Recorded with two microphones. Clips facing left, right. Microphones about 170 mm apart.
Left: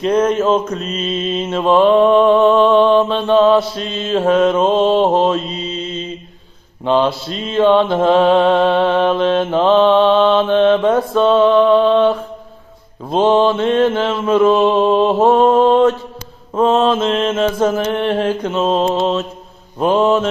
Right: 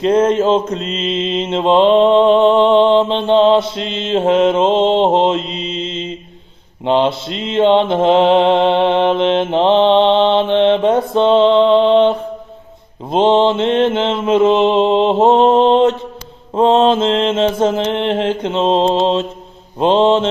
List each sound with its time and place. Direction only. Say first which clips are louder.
0.0 s mantra: right 2 dB; 25° right (ahead or behind)